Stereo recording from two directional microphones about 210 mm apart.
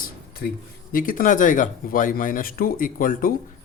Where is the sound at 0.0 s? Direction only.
45° left (ahead or behind).